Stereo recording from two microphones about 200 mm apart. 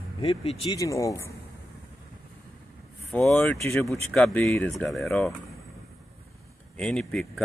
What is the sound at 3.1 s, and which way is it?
Speech, 5° left (ahead or behind).